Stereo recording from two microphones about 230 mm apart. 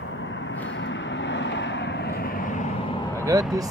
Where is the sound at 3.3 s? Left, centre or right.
Centre.